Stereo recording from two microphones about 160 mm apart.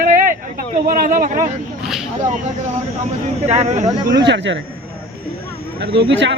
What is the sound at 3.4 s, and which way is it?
Speech, 45° right (ahead or behind).